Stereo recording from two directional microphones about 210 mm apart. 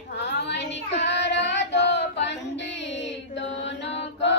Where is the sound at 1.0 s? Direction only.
55° left (ahead or behind).